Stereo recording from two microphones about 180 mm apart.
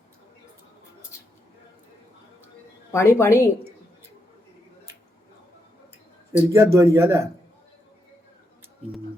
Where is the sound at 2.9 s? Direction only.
15° left (ahead or behind).